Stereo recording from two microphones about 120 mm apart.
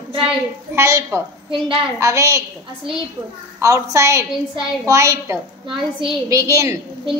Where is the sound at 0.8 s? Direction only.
25° right (ahead or behind).